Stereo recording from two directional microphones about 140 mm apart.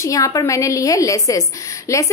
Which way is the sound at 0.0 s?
25° left (ahead or behind).